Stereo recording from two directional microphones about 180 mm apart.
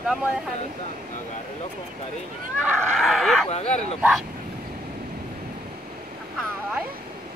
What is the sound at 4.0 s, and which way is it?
Speech, centre (ahead or behind).